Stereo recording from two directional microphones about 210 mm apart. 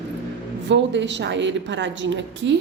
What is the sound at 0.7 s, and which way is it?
A woman's voice, 60° right (ahead or behind).